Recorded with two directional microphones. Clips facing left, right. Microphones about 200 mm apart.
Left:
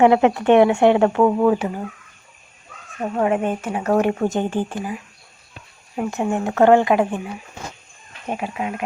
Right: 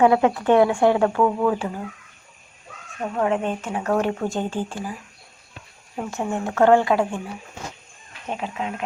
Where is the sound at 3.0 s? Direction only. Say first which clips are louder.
Left 3 dB; 10° left (ahead or behind).